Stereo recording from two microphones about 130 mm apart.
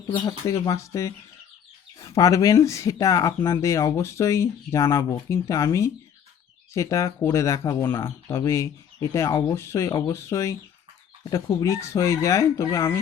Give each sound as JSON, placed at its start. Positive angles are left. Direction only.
{"t": 0.1, "sound": "speech", "side_deg": 30}